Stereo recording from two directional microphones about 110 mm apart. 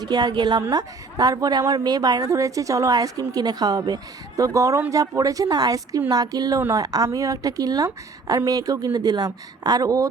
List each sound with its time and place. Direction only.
0.0 s a woman's voice: 40° right (ahead or behind)